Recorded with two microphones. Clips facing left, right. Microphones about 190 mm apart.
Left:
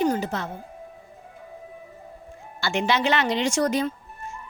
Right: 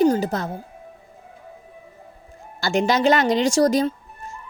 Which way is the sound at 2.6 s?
40° right (ahead or behind).